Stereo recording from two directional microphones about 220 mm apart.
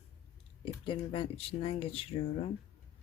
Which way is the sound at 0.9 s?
25° left (ahead or behind).